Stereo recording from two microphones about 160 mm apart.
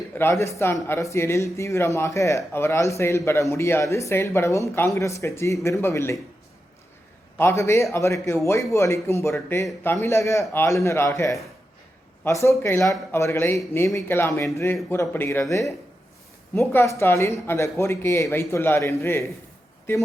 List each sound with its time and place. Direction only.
0.1 s speech: 15° left (ahead or behind)
7.3 s speech: 15° left (ahead or behind)